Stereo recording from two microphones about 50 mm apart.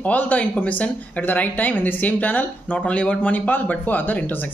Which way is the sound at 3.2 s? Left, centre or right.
Left.